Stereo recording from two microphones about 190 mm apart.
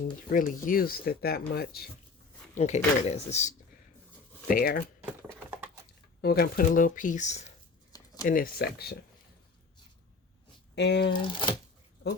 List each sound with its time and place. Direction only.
0.3 s speech: 45° left (ahead or behind)
2.6 s speech: 35° left (ahead or behind)
4.4 s speech: 50° left (ahead or behind)
6.2 s speech: 55° left (ahead or behind); by 7.5 s 35° left (ahead or behind)
7.9 s a sound: 20° left (ahead or behind)
8.3 s speech: 50° left (ahead or behind)
10.8 s speech: 65° left (ahead or behind)
11.2 s speech: 25° left (ahead or behind)